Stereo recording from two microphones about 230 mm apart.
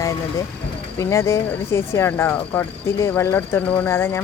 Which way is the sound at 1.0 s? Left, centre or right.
Centre.